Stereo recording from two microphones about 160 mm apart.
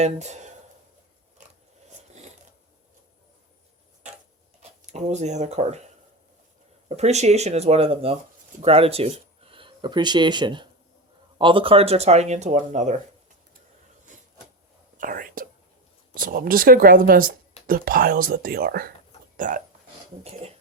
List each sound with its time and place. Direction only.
0.0 s speech: 45° right (ahead or behind)
4.9 s speech: 45° right (ahead or behind)
6.8 s speech: 45° right (ahead or behind)
14.9 s whispering: 60° right (ahead or behind)
16.1 s speech: 60° right (ahead or behind)
19.4 s speech: 55° right (ahead or behind)